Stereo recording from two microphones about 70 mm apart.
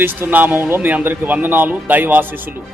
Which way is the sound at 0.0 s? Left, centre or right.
Right.